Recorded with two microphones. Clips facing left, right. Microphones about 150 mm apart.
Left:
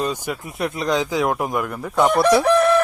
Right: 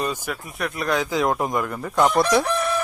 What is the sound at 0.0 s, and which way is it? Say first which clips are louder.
A man's voice: left 3 dB; 15° left (ahead or behind).